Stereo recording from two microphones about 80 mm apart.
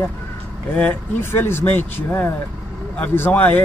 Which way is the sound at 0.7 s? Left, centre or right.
Left.